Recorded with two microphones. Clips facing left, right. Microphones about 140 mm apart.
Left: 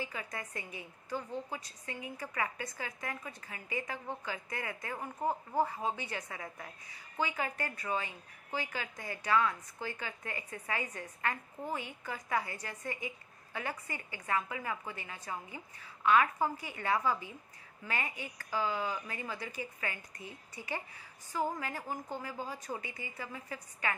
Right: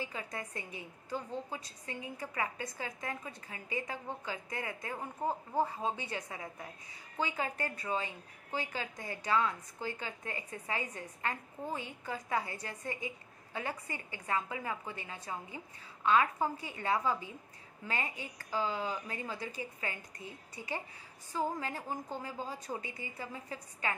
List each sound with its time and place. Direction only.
0.0 s a woman's voice: 30° right (ahead or behind)